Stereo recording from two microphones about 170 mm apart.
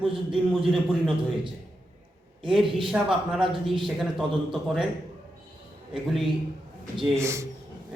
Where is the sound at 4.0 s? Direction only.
Centre (ahead or behind).